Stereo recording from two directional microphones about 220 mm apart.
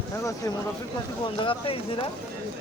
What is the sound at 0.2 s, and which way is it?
Speech, 15° left (ahead or behind).